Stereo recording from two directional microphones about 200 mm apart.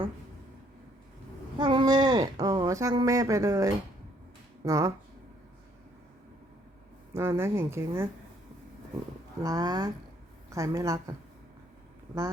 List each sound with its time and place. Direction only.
1.5 s a sound: 20° right (ahead or behind)
4.6 s speech: 15° right (ahead or behind)
7.1 s speech: 10° right (ahead or behind)
9.4 s speech: 20° right (ahead or behind)